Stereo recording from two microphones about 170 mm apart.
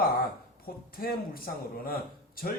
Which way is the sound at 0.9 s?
60° left (ahead or behind).